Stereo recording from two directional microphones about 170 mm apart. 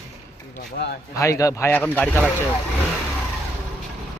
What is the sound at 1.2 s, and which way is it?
Speech, 20° left (ahead or behind).